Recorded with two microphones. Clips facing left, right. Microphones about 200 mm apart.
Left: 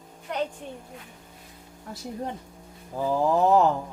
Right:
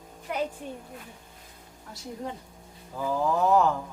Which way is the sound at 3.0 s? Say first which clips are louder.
Left 3 dB; 30° left (ahead or behind).